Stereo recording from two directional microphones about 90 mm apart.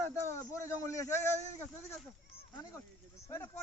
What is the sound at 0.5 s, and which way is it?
Speech, 35° left (ahead or behind).